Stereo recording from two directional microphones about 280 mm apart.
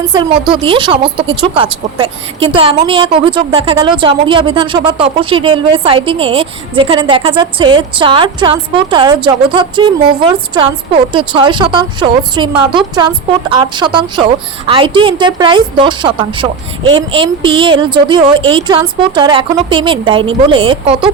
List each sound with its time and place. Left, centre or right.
0.1 s speech: centre